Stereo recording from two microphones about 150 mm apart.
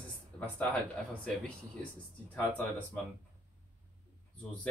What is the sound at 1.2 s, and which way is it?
Speech, 5° left (ahead or behind).